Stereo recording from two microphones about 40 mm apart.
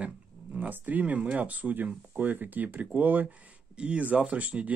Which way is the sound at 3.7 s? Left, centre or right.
Right.